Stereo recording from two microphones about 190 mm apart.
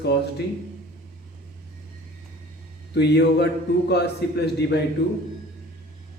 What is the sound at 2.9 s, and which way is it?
A man's voice, 60° left (ahead or behind).